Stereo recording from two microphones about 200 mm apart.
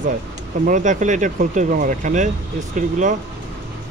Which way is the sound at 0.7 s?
40° right (ahead or behind).